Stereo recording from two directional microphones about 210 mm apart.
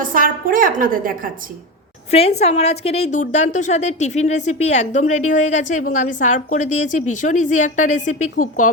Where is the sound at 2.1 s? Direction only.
30° left (ahead or behind).